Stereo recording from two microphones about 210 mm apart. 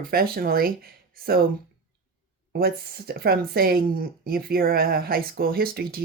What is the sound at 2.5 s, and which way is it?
Speech, 45° right (ahead or behind).